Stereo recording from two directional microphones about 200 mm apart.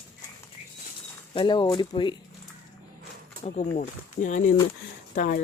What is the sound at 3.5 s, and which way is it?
Speech, 35° left (ahead or behind).